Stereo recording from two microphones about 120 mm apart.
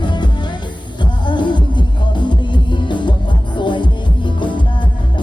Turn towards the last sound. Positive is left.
turn(degrees=40)  # may be behind; listen again after turning